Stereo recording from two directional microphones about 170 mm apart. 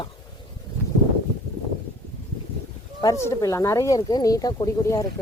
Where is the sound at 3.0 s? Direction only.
15° left (ahead or behind).